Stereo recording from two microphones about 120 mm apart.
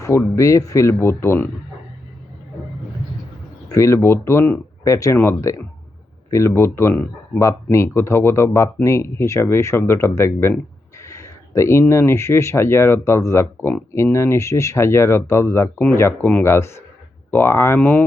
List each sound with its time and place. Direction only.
0.3 s speech: 25° left (ahead or behind)
3.7 s speech: 25° left (ahead or behind)